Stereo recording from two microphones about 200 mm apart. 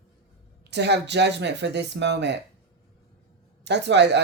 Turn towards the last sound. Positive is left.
turn(degrees=-60)  # may be behind; listen again after turning